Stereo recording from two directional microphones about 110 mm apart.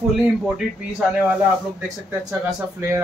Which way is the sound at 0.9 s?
15° right (ahead or behind).